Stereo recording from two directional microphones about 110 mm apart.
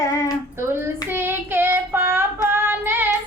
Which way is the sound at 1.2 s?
20° right (ahead or behind).